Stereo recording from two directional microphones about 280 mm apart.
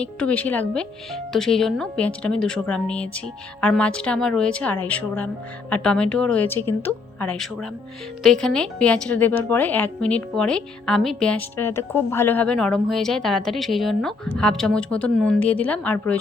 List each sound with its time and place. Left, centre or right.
0.0 s a woman's voice: centre